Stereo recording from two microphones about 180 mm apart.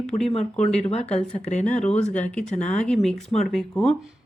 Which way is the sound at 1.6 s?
5° left (ahead or behind).